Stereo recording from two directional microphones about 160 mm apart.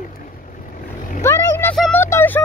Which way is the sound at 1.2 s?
15° left (ahead or behind).